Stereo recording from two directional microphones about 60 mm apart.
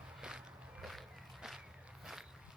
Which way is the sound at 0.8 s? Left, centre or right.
Centre.